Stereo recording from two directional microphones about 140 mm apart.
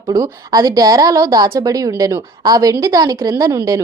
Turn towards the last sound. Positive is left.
turn(degrees=-25)  # may be behind; listen again after turning